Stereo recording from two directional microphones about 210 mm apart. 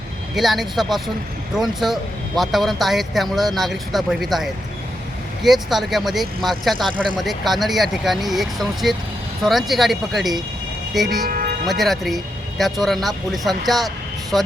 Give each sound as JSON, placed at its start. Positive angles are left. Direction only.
{"t": 0.3, "sound": "speech", "side_deg": 0}
{"t": 11.3, "sound": "a sound", "side_deg": -45}
{"t": 11.7, "sound": "speech", "side_deg": 0}